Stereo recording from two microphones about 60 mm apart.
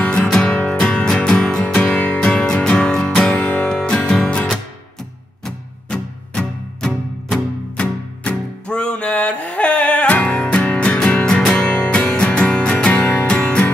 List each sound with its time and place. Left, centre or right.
0.0 s music: left
13.0 s music: left
13.3 s music: centre